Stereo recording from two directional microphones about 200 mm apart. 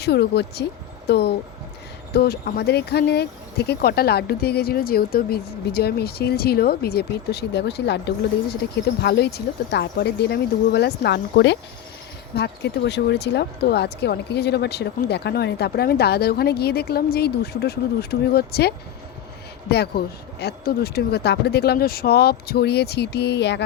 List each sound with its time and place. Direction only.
0.0 s speech: 55° left (ahead or behind)
19.7 s speech: 55° left (ahead or behind)